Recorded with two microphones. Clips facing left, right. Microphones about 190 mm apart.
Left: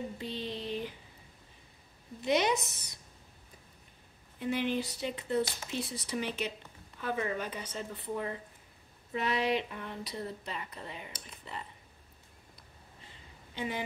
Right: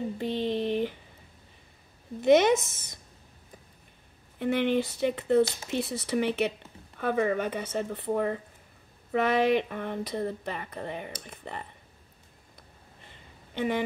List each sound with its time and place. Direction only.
0.2 s a sound: 55° right (ahead or behind)
2.2 s a woman's voice: 50° right (ahead or behind)
4.4 s speech: 60° right (ahead or behind)
13.6 s speech: 60° right (ahead or behind)